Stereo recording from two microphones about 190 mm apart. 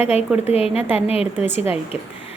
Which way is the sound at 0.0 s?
35° left (ahead or behind).